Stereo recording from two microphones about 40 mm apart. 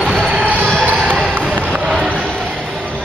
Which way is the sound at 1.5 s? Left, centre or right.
Right.